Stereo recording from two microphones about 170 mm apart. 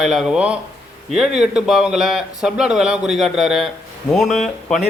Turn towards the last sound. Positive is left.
turn(degrees=0)  # may be behind; listen again after turning